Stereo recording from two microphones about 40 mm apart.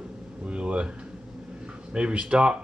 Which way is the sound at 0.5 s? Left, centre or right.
Right.